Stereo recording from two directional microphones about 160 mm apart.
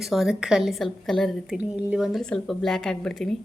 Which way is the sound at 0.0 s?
Centre (ahead or behind).